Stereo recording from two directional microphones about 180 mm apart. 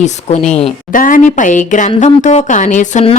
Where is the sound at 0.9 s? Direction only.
50° left (ahead or behind).